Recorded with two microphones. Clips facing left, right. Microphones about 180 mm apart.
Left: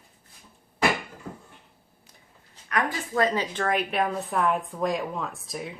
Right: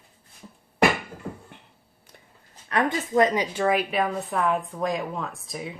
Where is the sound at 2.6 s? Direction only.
25° right (ahead or behind); by 5.7 s centre (ahead or behind).